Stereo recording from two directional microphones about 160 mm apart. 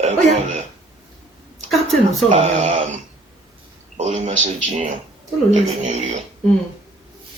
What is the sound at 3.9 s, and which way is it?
Speech, 40° right (ahead or behind).